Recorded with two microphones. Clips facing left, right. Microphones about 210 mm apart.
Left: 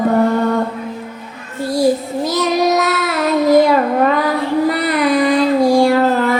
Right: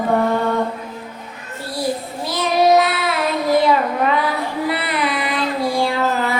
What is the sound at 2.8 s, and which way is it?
Child singing, 45° left (ahead or behind).